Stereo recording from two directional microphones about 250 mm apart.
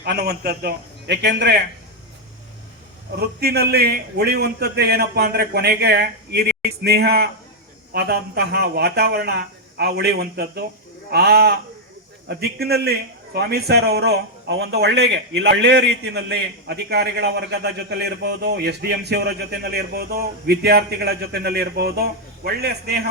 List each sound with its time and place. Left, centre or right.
0.0 s a man's voice: right
3.2 s a man's voice: right